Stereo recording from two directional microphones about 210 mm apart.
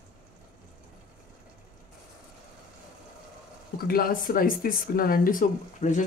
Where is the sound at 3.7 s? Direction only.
45° left (ahead or behind).